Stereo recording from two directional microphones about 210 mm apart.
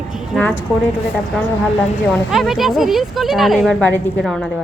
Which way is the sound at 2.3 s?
Centre (ahead or behind).